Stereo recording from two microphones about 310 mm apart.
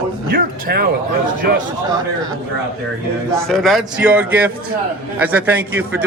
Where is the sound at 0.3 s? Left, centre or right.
Right.